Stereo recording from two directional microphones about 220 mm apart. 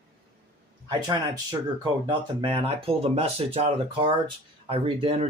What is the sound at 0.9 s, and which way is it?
Speech, 15° right (ahead or behind).